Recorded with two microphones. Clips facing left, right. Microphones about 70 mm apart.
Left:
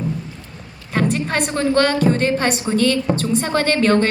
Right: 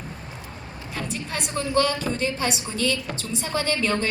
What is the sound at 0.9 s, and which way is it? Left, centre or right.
A woman's voice, left.